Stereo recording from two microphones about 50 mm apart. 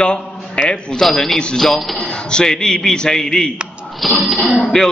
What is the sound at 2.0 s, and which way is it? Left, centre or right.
A man's voice, centre.